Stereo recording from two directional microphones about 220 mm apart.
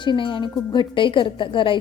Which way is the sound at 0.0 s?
20° left (ahead or behind).